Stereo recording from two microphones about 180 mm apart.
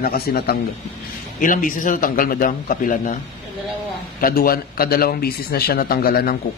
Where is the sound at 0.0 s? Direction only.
60° left (ahead or behind).